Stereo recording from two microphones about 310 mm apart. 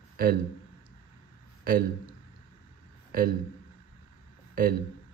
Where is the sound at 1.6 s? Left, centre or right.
Right.